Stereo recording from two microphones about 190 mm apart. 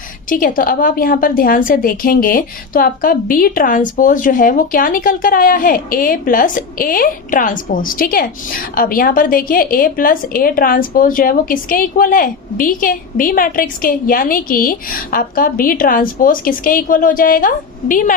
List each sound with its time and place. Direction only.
0.3 s a woman's voice: 45° left (ahead or behind)